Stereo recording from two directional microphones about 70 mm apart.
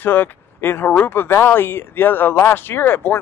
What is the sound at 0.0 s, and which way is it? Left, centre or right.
Speech, left.